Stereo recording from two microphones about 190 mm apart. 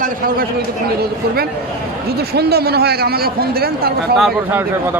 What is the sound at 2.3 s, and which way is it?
A man's voice, 55° right (ahead or behind).